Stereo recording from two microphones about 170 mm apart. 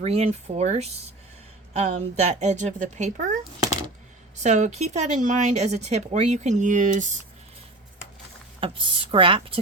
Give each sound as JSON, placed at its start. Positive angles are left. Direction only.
{"t": 0.0, "sound": "speech", "side_deg": -40}
{"t": 8.6, "sound": "speech", "side_deg": -35}